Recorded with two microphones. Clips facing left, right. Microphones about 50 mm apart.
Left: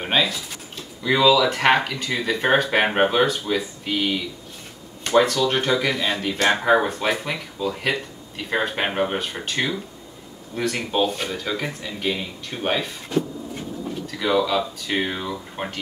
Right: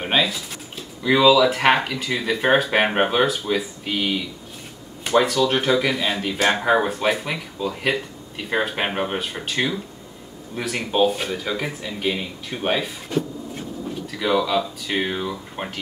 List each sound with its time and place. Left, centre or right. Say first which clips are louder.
0.0 s speech: right 1 dB; centre
14.1 s speech: even; centre